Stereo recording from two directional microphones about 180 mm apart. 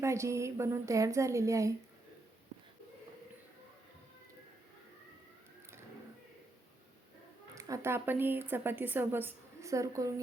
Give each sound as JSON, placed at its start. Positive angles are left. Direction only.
{"t": 0.0, "sound": "a woman's voice", "side_deg": -15}
{"t": 7.5, "sound": "a woman's voice", "side_deg": -15}